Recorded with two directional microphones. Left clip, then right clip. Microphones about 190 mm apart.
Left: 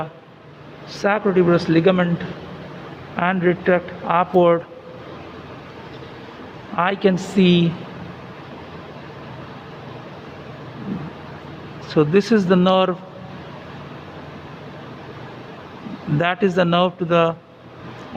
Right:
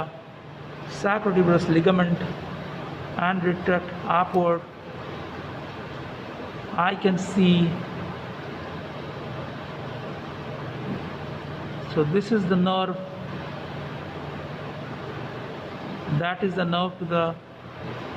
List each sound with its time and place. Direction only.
1.0 s speech: 40° left (ahead or behind)
3.2 s speech: 45° left (ahead or behind)
6.7 s speech: 45° left (ahead or behind)
11.9 s speech: 50° left (ahead or behind)
16.2 s speech: 50° left (ahead or behind)